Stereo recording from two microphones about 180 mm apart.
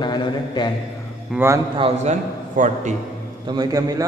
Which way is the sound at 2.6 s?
45° right (ahead or behind).